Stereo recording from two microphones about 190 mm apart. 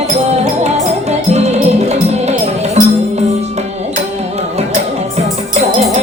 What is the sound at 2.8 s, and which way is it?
Music, 35° right (ahead or behind).